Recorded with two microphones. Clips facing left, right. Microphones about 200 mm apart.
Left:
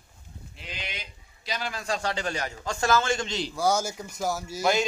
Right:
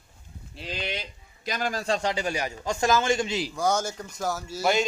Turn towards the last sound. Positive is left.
turn(degrees=0)  # may be behind; listen again after turning